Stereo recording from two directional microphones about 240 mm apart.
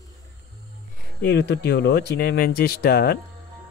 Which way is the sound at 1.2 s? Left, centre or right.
Left.